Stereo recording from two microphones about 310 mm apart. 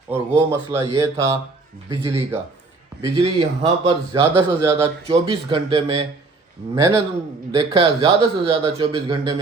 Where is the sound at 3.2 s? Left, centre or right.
Centre.